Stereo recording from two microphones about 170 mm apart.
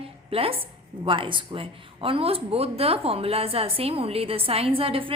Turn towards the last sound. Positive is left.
turn(degrees=-30)  # may be behind; listen again after turning